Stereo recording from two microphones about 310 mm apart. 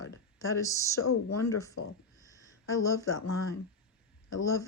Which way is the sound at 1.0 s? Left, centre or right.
Left.